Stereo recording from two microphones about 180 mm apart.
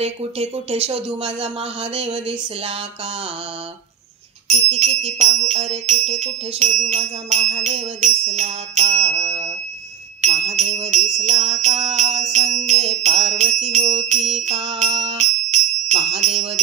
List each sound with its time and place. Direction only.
0.0 s jingle bell: 35° right (ahead or behind)
4.5 s jingle bell: 40° right (ahead or behind)
14.3 s music: 35° right (ahead or behind)